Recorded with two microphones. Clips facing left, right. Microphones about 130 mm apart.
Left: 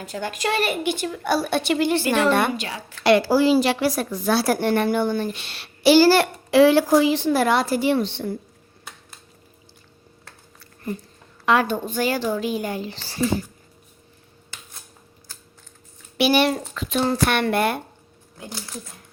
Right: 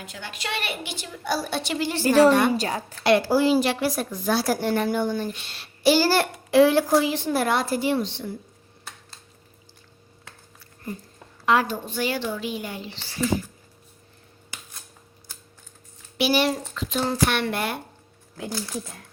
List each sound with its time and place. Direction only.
0.0 s a woman's voice: 40° left (ahead or behind); by 2.0 s 60° left (ahead or behind)
2.0 s a woman's voice: 40° right (ahead or behind)
3.0 s a woman's voice: 90° left; by 8.3 s 60° left (ahead or behind)
11.4 s a child's voice: 65° left (ahead or behind)
11.9 s a woman's voice: 45° left (ahead or behind)
16.1 s a child's voice: 60° left (ahead or behind)